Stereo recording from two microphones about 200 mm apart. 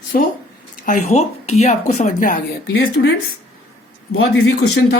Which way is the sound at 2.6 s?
55° left (ahead or behind).